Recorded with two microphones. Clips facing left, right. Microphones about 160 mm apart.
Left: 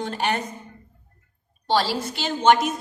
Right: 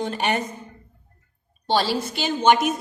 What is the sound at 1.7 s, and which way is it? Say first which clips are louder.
A woman's voice: right 1 dB; 15° right (ahead or behind).